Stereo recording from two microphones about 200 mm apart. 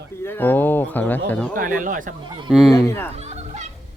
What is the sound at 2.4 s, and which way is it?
Speech, centre (ahead or behind).